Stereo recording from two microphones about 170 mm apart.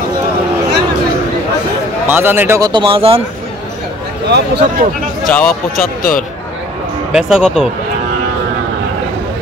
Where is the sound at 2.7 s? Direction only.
30° right (ahead or behind).